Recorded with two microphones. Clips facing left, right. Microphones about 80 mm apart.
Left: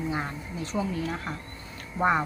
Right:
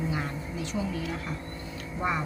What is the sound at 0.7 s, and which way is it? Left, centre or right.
Speech, left.